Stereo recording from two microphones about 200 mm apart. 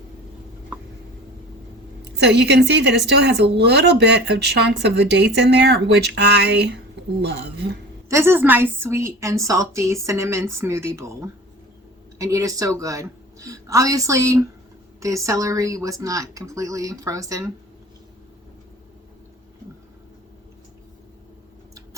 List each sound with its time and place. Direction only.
2.1 s a woman's voice: 60° right (ahead or behind)
8.1 s a woman's voice: 10° right (ahead or behind)